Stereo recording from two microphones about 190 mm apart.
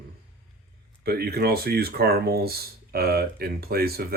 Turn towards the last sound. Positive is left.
turn(degrees=-55)  # may be behind; listen again after turning